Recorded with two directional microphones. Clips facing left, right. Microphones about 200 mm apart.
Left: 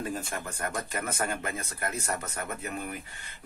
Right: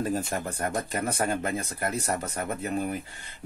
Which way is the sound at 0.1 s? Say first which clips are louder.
Right 6 dB; 35° right (ahead or behind).